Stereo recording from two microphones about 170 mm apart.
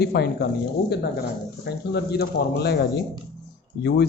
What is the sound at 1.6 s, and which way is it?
Speech, 75° left (ahead or behind).